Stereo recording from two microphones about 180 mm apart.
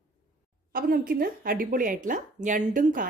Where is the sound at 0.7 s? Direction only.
55° right (ahead or behind).